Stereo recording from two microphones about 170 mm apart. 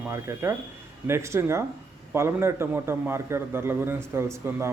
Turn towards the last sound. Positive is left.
turn(degrees=-15)  # may be behind; listen again after turning